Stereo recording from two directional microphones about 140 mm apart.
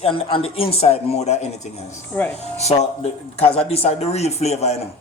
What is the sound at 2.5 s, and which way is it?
Speech, 50° left (ahead or behind).